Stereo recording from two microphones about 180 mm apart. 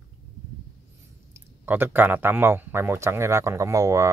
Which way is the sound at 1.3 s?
10° right (ahead or behind).